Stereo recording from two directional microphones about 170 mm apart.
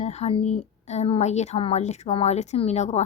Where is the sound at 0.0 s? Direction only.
40° left (ahead or behind).